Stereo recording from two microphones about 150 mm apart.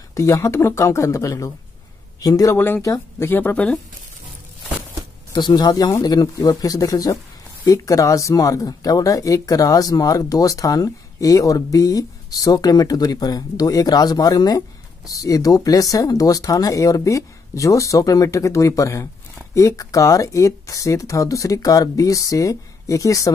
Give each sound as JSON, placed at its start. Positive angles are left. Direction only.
{"t": 0.1, "sound": "speech", "side_deg": 20}
{"t": 5.3, "sound": "speech", "side_deg": 30}